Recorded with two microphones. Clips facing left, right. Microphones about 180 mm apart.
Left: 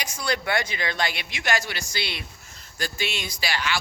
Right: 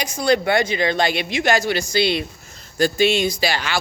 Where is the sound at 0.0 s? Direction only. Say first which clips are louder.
Right 10 dB; 25° right (ahead or behind).